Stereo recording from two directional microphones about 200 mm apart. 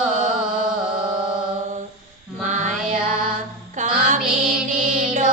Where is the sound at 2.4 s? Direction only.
40° right (ahead or behind).